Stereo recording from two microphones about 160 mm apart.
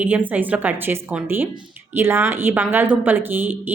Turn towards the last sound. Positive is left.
turn(degrees=-10)  # may be behind; listen again after turning